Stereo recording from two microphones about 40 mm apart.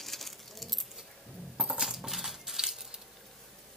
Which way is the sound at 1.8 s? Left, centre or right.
Centre.